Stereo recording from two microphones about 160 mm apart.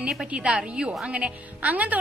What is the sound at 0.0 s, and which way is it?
A woman's voice, 5° right (ahead or behind).